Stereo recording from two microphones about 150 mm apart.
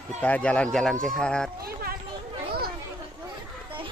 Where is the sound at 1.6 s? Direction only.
85° right.